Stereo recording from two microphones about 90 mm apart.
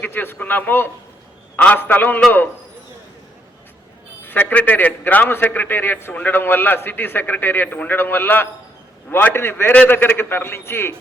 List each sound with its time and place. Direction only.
0.0 s a man's voice: 20° left (ahead or behind)
4.2 s a man's voice: 20° left (ahead or behind)